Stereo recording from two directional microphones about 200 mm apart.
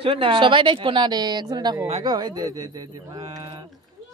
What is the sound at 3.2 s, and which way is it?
Speech, 30° right (ahead or behind).